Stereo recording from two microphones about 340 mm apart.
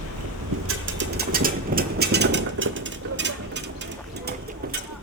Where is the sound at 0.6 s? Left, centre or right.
Right.